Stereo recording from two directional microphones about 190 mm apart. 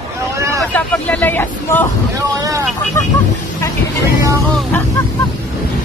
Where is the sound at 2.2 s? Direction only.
20° right (ahead or behind).